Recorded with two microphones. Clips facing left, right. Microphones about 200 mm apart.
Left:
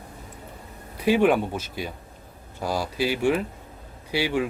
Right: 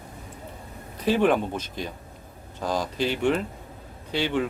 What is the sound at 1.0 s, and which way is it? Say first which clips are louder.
Speech: left 2 dB; 10° left (ahead or behind).